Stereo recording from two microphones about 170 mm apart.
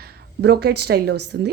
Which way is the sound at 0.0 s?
65° right (ahead or behind).